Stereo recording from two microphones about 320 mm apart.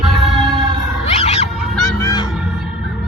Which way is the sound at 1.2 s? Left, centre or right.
Centre.